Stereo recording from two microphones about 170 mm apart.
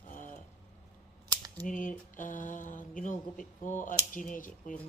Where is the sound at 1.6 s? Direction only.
50° left (ahead or behind).